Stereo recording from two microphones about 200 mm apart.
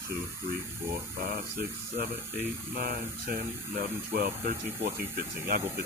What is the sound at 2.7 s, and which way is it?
Speech, 50° right (ahead or behind).